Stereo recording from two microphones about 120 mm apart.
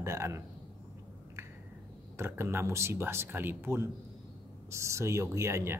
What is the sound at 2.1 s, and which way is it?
Speech, 20° right (ahead or behind).